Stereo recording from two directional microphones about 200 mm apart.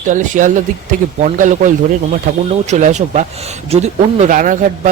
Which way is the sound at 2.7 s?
35° right (ahead or behind).